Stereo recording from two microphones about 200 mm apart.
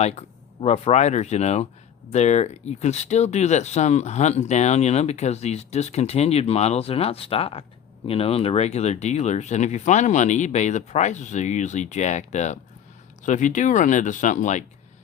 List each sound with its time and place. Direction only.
0.0 s speech: 30° left (ahead or behind)